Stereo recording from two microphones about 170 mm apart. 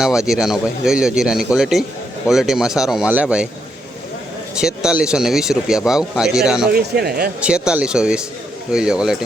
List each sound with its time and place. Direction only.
0.0 s speech: 5° right (ahead or behind)
4.5 s speech: 5° right (ahead or behind)
6.7 s speech: 70° right (ahead or behind)
7.4 s speech: 5° right (ahead or behind)